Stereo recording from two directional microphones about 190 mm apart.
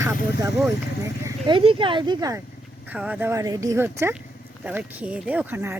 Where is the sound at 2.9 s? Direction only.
10° right (ahead or behind).